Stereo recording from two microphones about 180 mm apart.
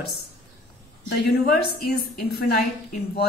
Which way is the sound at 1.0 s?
60° left (ahead or behind).